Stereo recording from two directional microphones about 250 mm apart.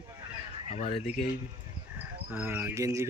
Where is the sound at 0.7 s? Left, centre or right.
Left.